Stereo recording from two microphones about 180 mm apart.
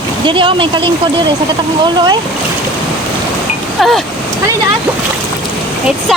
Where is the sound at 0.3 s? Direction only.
25° right (ahead or behind).